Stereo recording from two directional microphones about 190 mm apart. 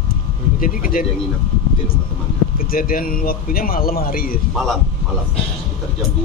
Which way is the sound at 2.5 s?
50° left (ahead or behind).